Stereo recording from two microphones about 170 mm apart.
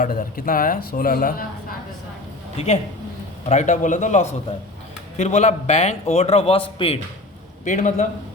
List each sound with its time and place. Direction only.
0.0 s speech: 55° left (ahead or behind)
3.5 s a man's voice: 45° left (ahead or behind)
7.6 s a man's voice: 45° left (ahead or behind)